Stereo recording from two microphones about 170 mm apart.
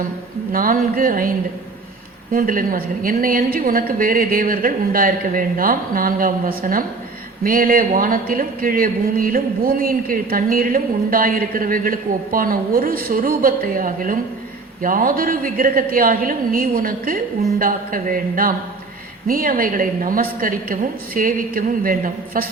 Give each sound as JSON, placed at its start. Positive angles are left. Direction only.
{"t": 0.5, "sound": "a man's voice", "side_deg": -55}
{"t": 2.3, "sound": "a man's voice", "side_deg": -55}